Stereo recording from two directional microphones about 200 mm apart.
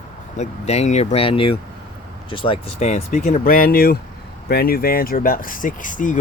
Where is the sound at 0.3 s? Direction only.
35° left (ahead or behind).